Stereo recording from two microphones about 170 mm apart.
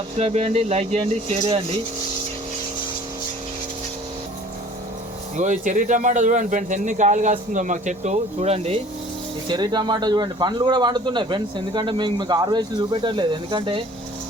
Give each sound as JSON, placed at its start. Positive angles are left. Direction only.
{"t": 0.2, "sound": "speech", "side_deg": -40}
{"t": 5.4, "sound": "speech", "side_deg": -45}
{"t": 9.5, "sound": "speech", "side_deg": -25}